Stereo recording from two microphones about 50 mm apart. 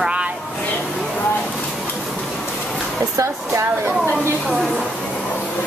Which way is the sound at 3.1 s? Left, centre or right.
Right.